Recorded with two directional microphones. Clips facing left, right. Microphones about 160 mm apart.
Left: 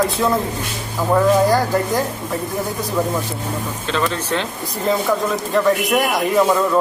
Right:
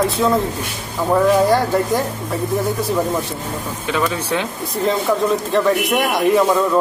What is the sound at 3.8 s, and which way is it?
Speech, 10° right (ahead or behind).